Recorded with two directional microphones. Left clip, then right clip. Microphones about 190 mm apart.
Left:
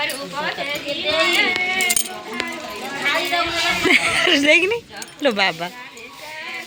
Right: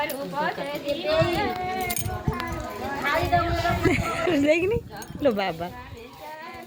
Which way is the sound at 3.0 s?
25° right (ahead or behind).